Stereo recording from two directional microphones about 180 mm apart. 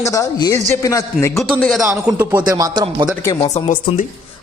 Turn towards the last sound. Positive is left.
turn(degrees=45)  # may be behind; listen again after turning